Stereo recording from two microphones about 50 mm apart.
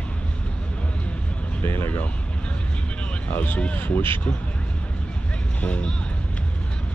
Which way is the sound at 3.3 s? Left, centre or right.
Left.